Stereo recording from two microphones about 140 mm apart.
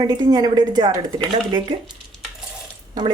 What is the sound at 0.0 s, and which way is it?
Speech, 30° right (ahead or behind).